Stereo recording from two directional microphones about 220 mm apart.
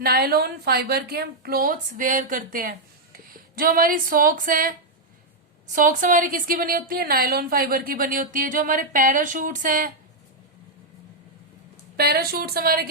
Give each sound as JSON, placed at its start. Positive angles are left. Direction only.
{"t": 0.0, "sound": "a woman's voice", "side_deg": -45}
{"t": 5.7, "sound": "a woman's voice", "side_deg": -35}
{"t": 11.9, "sound": "a woman's voice", "side_deg": -45}